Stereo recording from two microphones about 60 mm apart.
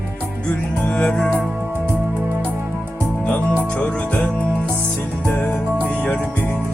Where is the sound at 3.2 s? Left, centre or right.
Left.